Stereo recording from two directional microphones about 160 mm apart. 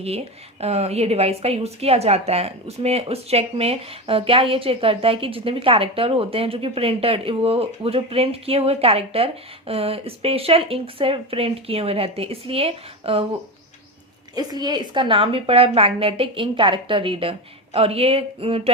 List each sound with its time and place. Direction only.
0.6 s a woman's voice: 40° right (ahead or behind)
14.3 s a woman's voice: 25° right (ahead or behind)